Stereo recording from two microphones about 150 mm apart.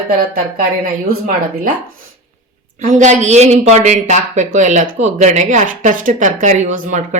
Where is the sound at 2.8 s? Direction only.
55° right (ahead or behind).